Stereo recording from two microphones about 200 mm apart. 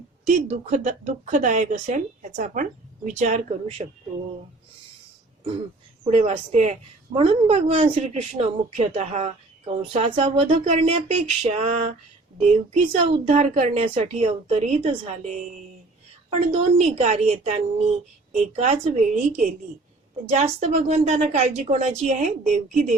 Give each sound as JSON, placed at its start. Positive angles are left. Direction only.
{"t": 0.3, "sound": "a woman's voice", "side_deg": -35}
{"t": 6.1, "sound": "a woman's voice", "side_deg": -30}
{"t": 16.3, "sound": "a woman's voice", "side_deg": -30}
{"t": 20.3, "sound": "a woman's voice", "side_deg": -35}